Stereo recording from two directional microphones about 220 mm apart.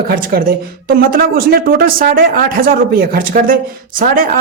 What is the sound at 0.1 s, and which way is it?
Speech, 45° right (ahead or behind).